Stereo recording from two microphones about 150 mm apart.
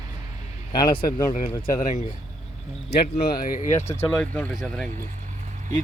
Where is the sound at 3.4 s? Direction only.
60° left (ahead or behind).